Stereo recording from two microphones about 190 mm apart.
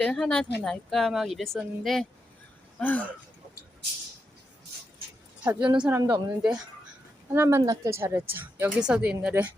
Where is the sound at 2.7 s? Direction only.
10° left (ahead or behind).